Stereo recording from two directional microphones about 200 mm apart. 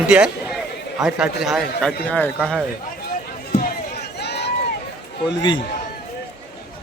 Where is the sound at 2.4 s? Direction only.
5° right (ahead or behind).